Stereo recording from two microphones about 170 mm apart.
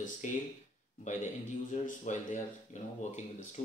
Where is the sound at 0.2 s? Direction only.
45° left (ahead or behind).